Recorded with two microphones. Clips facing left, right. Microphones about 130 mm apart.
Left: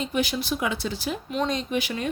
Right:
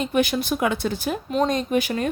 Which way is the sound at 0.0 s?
55° right (ahead or behind).